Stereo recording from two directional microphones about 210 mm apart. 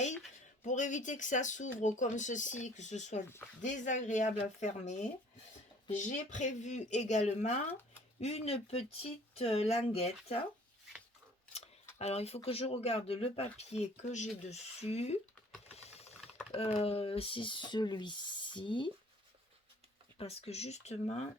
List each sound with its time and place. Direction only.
0.6 s speech: 35° left (ahead or behind)
6.3 s speech: 35° left (ahead or behind)
11.5 s a sound: 30° left (ahead or behind)
12.5 s speech: 25° left (ahead or behind)
15.7 s typing: 30° left (ahead or behind)
16.5 s speech: 30° left (ahead or behind)
20.1 s speech: 30° left (ahead or behind)